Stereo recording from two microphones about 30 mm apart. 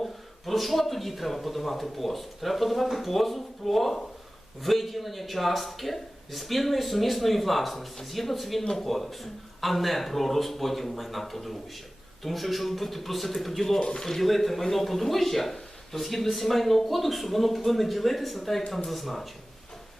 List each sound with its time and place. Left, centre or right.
0.0 s speech: centre
13.7 s speech: left
14.2 s speech: centre